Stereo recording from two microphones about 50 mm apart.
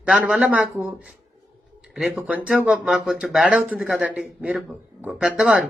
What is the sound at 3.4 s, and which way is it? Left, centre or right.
Speech, centre.